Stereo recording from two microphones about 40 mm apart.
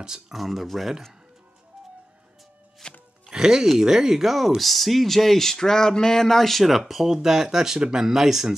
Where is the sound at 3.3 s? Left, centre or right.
Centre.